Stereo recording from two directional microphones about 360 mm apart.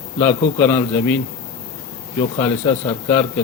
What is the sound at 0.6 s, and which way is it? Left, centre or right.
Speech, centre.